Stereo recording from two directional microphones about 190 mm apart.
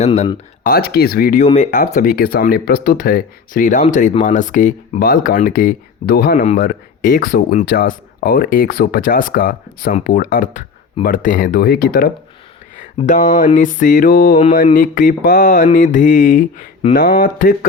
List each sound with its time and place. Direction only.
0.0 s speech: 35° left (ahead or behind)
0.7 s speech: 55° left (ahead or behind)
13.0 s speech: 40° left (ahead or behind)